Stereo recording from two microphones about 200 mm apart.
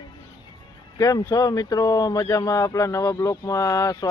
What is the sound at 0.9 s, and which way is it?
Speech, 20° left (ahead or behind).